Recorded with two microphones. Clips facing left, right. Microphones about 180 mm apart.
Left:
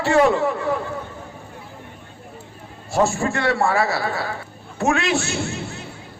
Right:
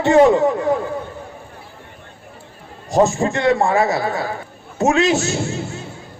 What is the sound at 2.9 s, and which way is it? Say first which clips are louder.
A man's voice: right 4 dB; 20° right (ahead or behind).